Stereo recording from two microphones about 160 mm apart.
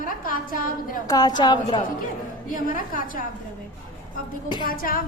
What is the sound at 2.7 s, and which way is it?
Speech, 60° left (ahead or behind).